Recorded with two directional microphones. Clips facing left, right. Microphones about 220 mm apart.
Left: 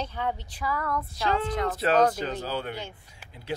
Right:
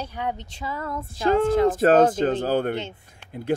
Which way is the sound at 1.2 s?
50° right (ahead or behind).